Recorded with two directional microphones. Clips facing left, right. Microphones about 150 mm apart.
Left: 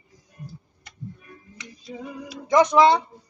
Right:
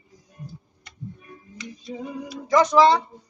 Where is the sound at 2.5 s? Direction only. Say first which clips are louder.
Even; 20° left (ahead or behind).